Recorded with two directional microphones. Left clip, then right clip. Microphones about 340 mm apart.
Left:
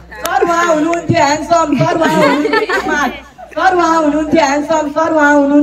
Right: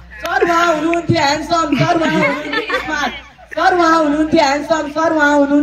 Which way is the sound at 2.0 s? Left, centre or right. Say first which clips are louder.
Left 5 dB; left.